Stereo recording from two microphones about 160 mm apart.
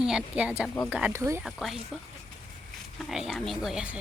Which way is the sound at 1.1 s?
15° right (ahead or behind).